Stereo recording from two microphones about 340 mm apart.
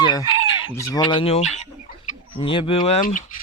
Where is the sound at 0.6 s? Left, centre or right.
Centre.